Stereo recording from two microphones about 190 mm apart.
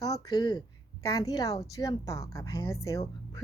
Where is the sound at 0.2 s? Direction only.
20° left (ahead or behind).